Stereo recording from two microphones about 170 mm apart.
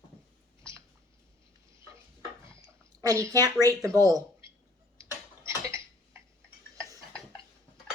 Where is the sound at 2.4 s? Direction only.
20° right (ahead or behind).